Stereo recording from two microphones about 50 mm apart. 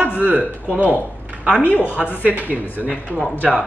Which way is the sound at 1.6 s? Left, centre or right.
Left.